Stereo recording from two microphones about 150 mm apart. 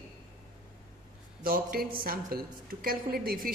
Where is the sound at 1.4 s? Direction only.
75° right (ahead or behind).